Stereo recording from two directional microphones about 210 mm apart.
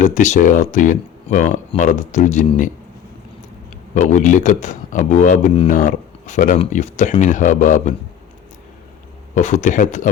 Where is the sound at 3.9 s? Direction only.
35° left (ahead or behind).